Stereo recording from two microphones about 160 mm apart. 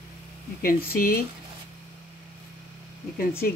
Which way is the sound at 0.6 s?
65° left (ahead or behind).